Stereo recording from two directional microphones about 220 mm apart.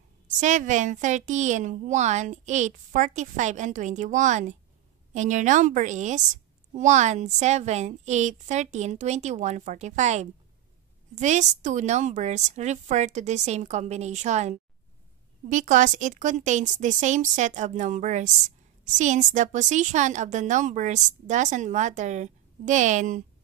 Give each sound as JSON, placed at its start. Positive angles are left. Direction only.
{"t": 0.4, "sound": "a woman's voice", "side_deg": -35}